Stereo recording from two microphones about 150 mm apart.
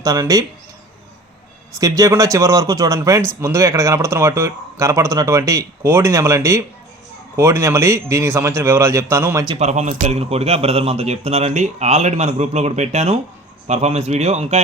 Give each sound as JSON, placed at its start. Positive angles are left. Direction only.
{"t": 0.0, "sound": "speech", "side_deg": -25}
{"t": 1.8, "sound": "speech", "side_deg": -20}
{"t": 9.6, "sound": "a man's voice", "side_deg": -50}